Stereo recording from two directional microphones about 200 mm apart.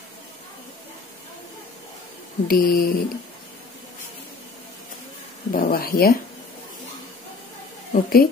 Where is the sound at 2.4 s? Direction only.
45° left (ahead or behind).